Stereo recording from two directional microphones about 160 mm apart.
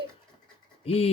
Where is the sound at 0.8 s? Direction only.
40° left (ahead or behind).